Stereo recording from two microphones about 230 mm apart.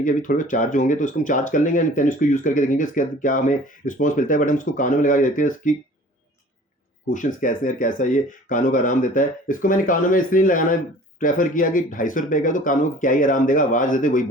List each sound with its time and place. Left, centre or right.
0.0 s speech: left
7.1 s speech: left